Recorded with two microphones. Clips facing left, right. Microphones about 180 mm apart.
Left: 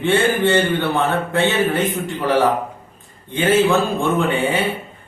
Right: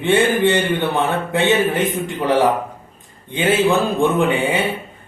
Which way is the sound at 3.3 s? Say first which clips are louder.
Left 1 dB; 15° right (ahead or behind).